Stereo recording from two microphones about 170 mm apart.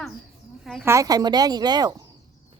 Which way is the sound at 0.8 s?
20° right (ahead or behind).